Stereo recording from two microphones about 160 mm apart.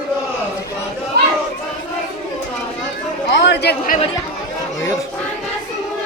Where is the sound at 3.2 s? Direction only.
90° left.